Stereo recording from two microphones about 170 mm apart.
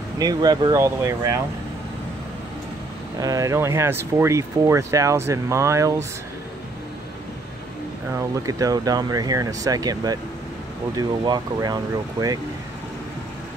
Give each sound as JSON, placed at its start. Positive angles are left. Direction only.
{"t": 0.2, "sound": "speech", "side_deg": -25}
{"t": 3.2, "sound": "speech", "side_deg": -20}
{"t": 8.1, "sound": "speech", "side_deg": -20}